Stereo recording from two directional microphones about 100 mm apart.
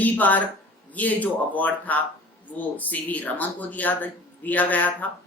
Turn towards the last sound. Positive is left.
turn(degrees=15)  # may be behind; listen again after turning